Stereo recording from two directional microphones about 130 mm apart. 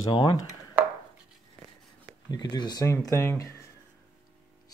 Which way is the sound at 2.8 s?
25° left (ahead or behind).